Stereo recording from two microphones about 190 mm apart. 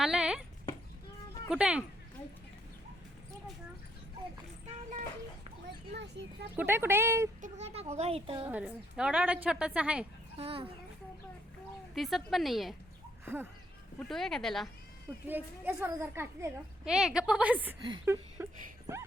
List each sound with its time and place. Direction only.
0.0 s speech: 5° right (ahead or behind)
1.5 s a woman's voice: 5° right (ahead or behind)
5.9 s a sound: 60° right (ahead or behind)
6.6 s a woman's voice: 10° right (ahead or behind)
7.4 s a sound: 35° right (ahead or behind)
7.9 s a woman's voice: 30° right (ahead or behind)
8.4 s a woman's voice: 5° right (ahead or behind)
10.3 s speech: 30° right (ahead or behind)
11.9 s a woman's voice: centre (ahead or behind)
13.2 s a woman's voice: 10° right (ahead or behind)
14.0 s a woman's voice: centre (ahead or behind)
15.3 s a woman's voice: 10° right (ahead or behind)
18.0 s a sound: 10° right (ahead or behind)